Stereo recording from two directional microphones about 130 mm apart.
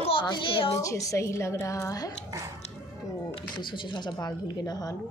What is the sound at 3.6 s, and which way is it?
Speech, 35° left (ahead or behind).